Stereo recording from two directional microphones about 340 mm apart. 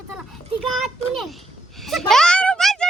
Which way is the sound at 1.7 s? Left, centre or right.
Centre.